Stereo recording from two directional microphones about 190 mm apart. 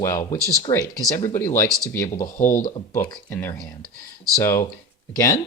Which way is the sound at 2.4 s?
40° left (ahead or behind).